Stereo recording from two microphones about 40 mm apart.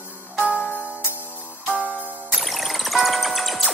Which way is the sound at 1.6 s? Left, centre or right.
Right.